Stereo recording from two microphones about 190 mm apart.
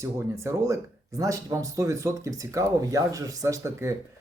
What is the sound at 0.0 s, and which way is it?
Speech, 15° right (ahead or behind).